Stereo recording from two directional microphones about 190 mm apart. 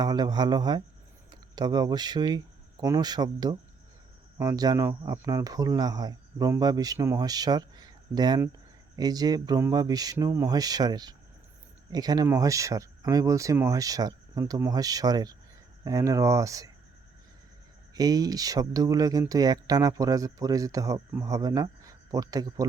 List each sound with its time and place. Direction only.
0.0 s speech: 20° right (ahead or behind)
17.9 s speech: 20° right (ahead or behind)